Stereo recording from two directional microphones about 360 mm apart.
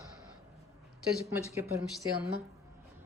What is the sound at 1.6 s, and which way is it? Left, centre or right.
Speech, centre.